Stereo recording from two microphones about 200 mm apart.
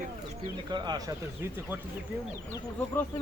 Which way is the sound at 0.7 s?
20° right (ahead or behind).